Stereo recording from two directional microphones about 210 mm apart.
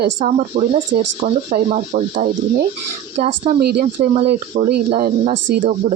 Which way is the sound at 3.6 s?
50° right (ahead or behind).